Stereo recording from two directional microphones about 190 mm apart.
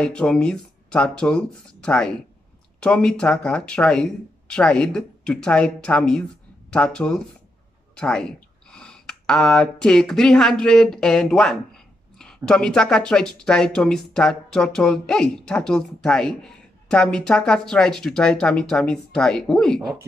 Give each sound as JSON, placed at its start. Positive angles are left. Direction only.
{"t": 0.0, "sound": "speech", "side_deg": 5}